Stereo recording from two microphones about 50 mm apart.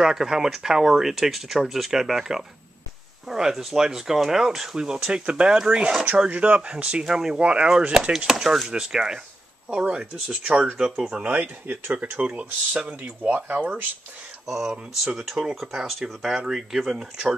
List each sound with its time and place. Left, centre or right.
0.0 s speech: centre
7.3 s speech: right
11.3 s speech: right
14.4 s speech: centre